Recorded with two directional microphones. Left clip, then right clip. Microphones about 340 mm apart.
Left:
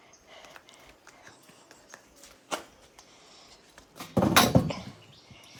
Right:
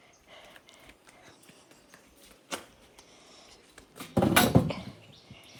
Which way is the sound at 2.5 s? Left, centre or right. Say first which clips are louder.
Left 4 dB; left.